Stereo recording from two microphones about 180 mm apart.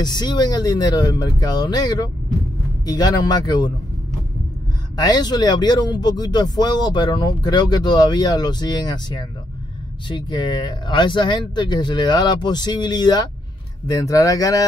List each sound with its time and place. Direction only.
0.0 s speech: 25° left (ahead or behind)
4.9 s speech: 20° left (ahead or behind)